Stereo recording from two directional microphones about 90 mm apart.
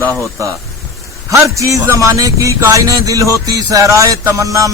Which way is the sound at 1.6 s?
35° right (ahead or behind).